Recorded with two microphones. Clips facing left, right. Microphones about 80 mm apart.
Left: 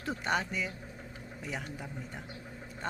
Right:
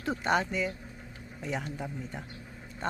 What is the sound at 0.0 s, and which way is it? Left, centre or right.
Speech, centre.